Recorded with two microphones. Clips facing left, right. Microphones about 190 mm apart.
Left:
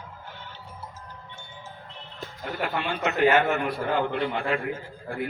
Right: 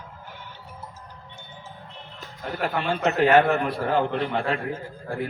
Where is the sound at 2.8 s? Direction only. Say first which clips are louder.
Right 2 dB; 40° right (ahead or behind).